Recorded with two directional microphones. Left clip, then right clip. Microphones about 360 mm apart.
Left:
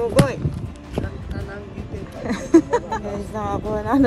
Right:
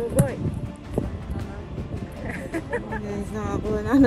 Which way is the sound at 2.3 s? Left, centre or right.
Left.